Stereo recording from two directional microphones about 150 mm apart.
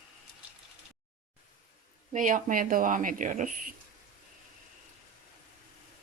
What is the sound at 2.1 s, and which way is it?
Speech, 60° right (ahead or behind).